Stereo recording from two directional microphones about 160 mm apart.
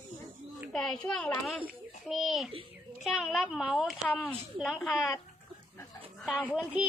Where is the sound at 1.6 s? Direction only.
Centre (ahead or behind).